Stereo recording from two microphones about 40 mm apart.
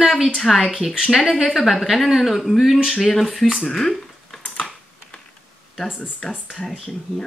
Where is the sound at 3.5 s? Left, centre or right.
Centre.